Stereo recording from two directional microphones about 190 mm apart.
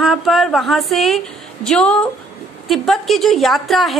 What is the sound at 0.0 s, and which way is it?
A woman's voice, centre (ahead or behind).